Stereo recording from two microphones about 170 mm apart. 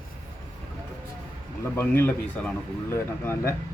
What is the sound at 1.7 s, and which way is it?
Speech, 10° left (ahead or behind).